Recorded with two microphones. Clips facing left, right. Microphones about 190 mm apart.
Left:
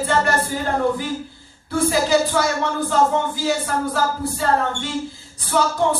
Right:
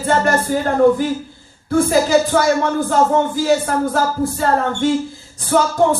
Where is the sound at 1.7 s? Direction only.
45° right (ahead or behind).